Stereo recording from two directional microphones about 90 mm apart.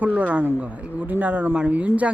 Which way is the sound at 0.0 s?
15° right (ahead or behind).